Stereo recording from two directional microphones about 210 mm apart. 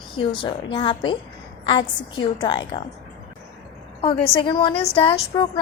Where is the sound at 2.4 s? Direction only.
20° left (ahead or behind).